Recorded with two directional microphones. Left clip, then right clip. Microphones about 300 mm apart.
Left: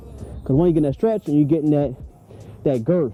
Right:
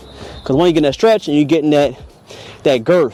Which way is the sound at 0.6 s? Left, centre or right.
Centre.